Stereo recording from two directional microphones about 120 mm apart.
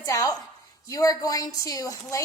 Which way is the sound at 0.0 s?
30° left (ahead or behind).